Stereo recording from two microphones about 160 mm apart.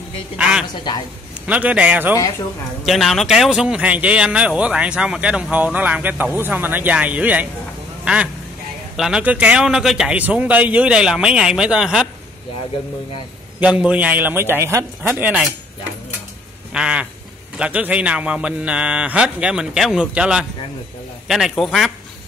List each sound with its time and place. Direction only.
0.4 s a man's voice: 5° right (ahead or behind)
0.9 s a woman's voice: 25° left (ahead or behind)
1.5 s a man's voice: 10° right (ahead or behind)
2.8 s a man's voice: centre (ahead or behind)
13.6 s a man's voice: 10° right (ahead or behind)
16.7 s a man's voice: 5° right (ahead or behind)